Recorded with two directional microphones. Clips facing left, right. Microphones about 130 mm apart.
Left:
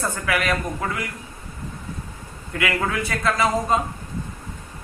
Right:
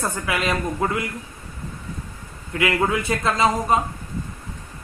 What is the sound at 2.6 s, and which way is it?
Speech, 20° right (ahead or behind).